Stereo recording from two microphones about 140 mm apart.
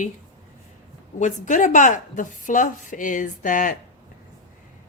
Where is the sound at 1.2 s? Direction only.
65° left (ahead or behind).